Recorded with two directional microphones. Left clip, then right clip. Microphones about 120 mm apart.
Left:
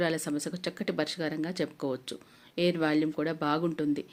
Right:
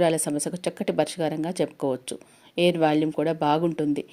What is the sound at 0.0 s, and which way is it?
Speech, 40° right (ahead or behind).